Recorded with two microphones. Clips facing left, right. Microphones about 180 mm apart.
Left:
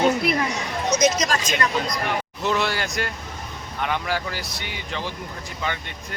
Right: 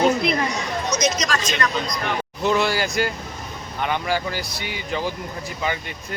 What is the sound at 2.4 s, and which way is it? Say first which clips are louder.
Speech: right 4 dB; centre (ahead or behind).